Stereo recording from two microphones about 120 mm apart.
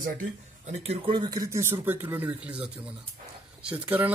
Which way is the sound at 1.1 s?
35° right (ahead or behind).